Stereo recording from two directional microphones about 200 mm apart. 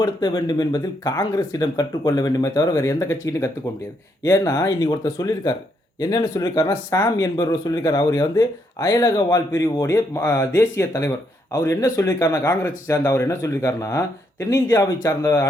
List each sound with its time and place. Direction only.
0.0 s speech: 20° left (ahead or behind)